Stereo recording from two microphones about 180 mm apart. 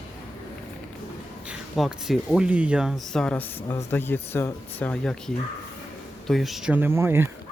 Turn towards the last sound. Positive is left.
turn(degrees=-15)  # may be behind; listen again after turning